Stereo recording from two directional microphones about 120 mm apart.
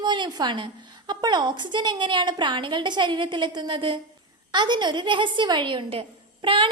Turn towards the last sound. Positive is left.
turn(degrees=-45)  # may be behind; listen again after turning